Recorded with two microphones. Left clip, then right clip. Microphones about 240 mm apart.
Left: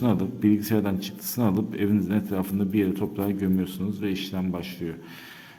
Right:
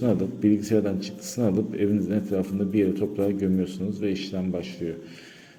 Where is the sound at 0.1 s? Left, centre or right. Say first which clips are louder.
Right 2 dB; centre.